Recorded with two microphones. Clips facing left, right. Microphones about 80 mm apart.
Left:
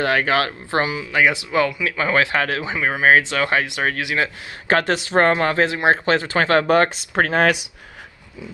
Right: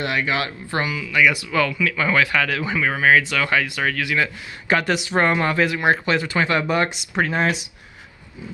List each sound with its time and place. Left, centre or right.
0.0 s speech: left
0.7 s speech: left
4.7 s speech: left
5.6 s speech: left
6.4 s speech: left